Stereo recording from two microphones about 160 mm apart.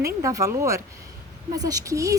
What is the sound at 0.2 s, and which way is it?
Speech, 20° right (ahead or behind).